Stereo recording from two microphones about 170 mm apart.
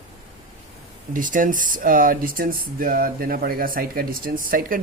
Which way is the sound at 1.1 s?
50° right (ahead or behind).